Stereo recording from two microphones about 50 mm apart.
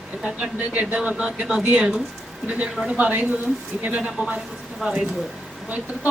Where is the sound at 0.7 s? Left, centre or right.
Right; by 2.0 s centre.